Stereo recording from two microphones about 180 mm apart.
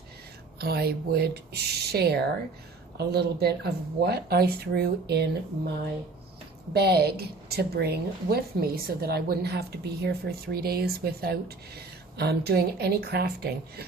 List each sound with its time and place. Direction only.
0.6 s a woman's voice: 60° right (ahead or behind)
6.7 s a woman's voice: 65° right (ahead or behind)